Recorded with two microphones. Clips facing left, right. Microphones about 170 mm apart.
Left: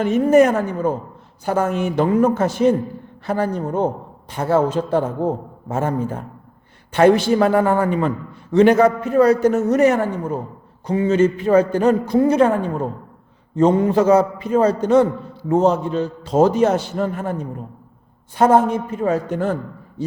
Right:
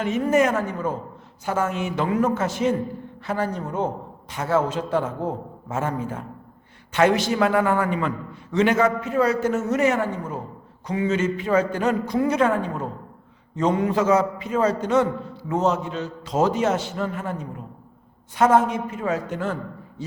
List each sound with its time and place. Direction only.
0.3 s a man's voice: 35° left (ahead or behind)
13.6 s a man's voice: 30° left (ahead or behind)